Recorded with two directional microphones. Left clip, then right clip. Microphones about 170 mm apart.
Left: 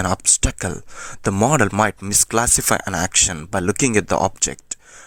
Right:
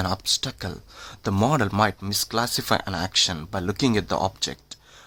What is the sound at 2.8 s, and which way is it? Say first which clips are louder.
Speech: left 6 dB; 40° left (ahead or behind).